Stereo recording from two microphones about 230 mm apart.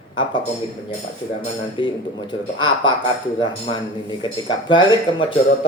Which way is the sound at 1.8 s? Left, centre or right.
Left.